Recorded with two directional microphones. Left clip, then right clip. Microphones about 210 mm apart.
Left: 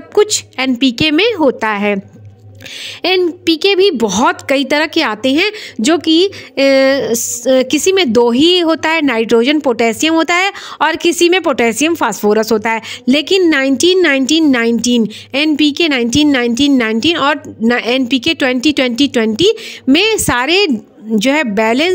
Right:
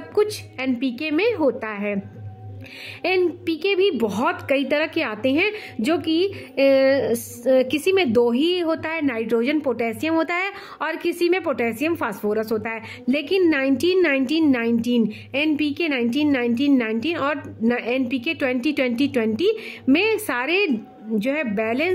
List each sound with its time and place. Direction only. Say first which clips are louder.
0.1 s a woman's voice: left 10 dB; 25° left (ahead or behind)
3.0 s a woman's voice: left 8 dB; 30° left (ahead or behind)